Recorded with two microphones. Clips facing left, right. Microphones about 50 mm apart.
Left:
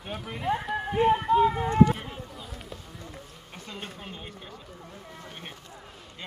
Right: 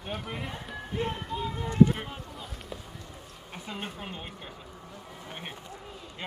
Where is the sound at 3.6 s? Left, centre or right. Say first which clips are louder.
Right 2 dB; centre.